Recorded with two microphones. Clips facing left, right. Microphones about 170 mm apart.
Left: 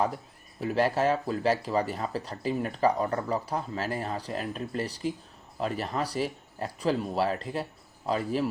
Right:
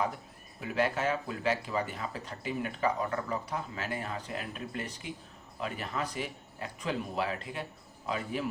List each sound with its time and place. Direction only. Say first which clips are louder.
0.6 s speech: left 5 dB; 35° left (ahead or behind)